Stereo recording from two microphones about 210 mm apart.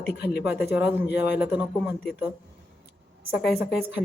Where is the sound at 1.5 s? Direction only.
5° right (ahead or behind).